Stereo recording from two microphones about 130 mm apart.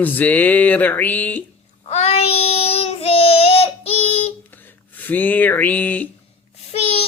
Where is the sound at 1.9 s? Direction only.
50° left (ahead or behind).